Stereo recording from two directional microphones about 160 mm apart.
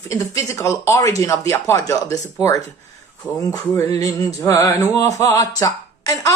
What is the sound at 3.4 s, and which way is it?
Male singing, 20° left (ahead or behind).